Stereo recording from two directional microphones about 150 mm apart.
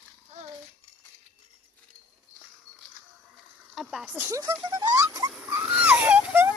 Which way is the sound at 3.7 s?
5° right (ahead or behind).